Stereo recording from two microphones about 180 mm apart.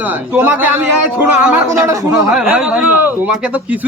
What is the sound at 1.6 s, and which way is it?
Speech, 15° right (ahead or behind).